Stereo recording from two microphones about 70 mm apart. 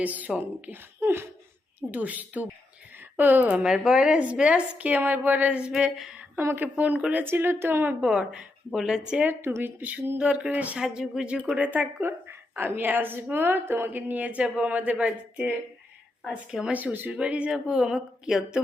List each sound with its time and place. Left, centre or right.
0.0 s a woman's voice: right
1.9 s a woman's voice: right
3.7 s a woman's voice: centre
6.6 s a woman's voice: right
8.0 s a woman's voice: centre
9.2 s a woman's voice: right
10.2 s a woman's voice: centre
10.8 s a woman's voice: centre
16.7 s a woman's voice: right; by 18.6 s centre